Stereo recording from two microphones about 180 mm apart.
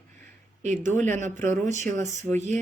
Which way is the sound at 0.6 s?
40° right (ahead or behind).